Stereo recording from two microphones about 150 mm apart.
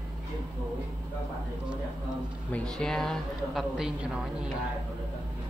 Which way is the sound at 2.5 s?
5° left (ahead or behind).